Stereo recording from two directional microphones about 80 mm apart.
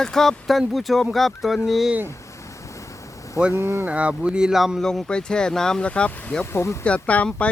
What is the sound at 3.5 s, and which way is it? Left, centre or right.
Speech, right.